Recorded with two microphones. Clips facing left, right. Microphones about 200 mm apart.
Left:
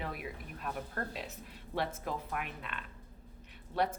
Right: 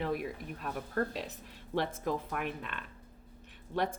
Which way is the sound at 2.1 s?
45° right (ahead or behind).